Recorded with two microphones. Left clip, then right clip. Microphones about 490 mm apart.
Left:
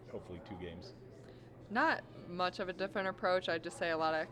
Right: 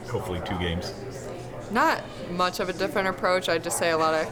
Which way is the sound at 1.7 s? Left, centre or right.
Left.